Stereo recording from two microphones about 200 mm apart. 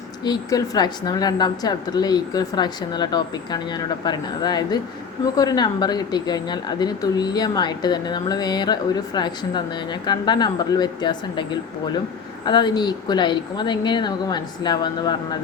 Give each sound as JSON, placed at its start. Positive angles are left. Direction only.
{"t": 0.3, "sound": "speech", "side_deg": 20}